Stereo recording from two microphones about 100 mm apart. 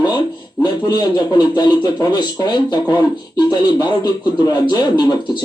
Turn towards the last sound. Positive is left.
turn(degrees=45)  # may be behind; listen again after turning